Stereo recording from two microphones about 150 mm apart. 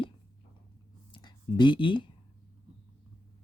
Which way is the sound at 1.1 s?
30° left (ahead or behind).